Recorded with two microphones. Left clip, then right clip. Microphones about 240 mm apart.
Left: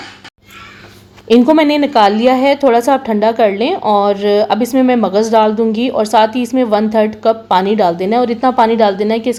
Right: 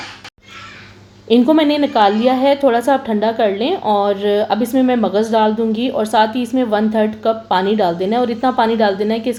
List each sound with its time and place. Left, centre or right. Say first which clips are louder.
1.3 s a woman's voice: left 3 dB; left